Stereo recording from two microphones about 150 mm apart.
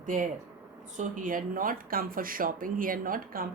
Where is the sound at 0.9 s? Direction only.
55° right (ahead or behind).